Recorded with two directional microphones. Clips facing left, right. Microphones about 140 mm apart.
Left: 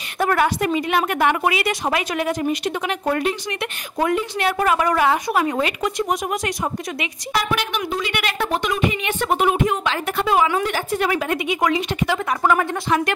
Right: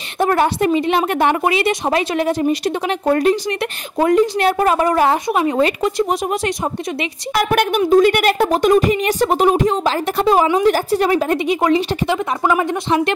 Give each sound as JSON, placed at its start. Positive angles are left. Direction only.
{"t": 0.2, "sound": "a woman's voice", "side_deg": -30}
{"t": 5.3, "sound": "a woman's voice", "side_deg": -20}
{"t": 7.3, "sound": "a woman's voice", "side_deg": -50}
{"t": 12.1, "sound": "a woman's voice", "side_deg": -15}